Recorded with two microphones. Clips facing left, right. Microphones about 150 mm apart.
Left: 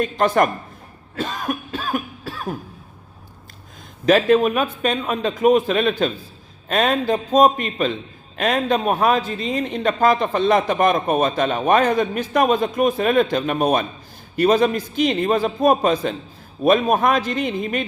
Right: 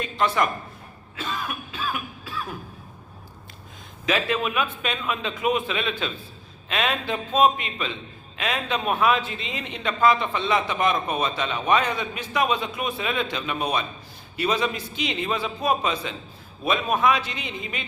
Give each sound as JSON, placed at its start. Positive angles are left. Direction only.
{"t": 0.0, "sound": "a man's voice", "side_deg": 50}
{"t": 1.1, "sound": "cough", "side_deg": 45}
{"t": 4.0, "sound": "a man's voice", "side_deg": 45}